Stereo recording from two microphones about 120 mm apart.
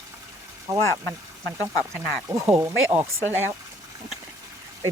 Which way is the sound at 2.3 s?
20° right (ahead or behind).